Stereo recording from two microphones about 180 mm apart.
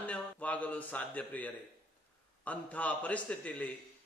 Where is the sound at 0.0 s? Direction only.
10° left (ahead or behind).